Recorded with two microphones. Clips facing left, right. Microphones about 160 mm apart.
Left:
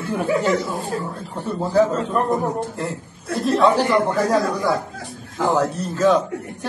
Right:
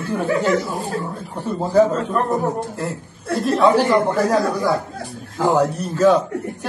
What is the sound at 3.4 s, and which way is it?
Speech, centre (ahead or behind).